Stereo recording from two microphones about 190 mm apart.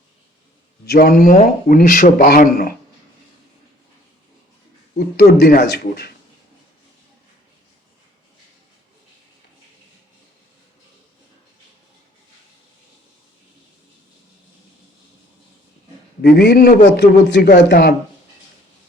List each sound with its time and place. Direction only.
0.9 s speech: 55° left (ahead or behind)
4.9 s speech: 55° left (ahead or behind)
16.2 s speech: 60° left (ahead or behind)